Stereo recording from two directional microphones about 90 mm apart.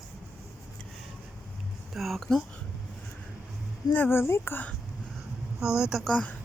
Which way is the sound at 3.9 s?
25° left (ahead or behind).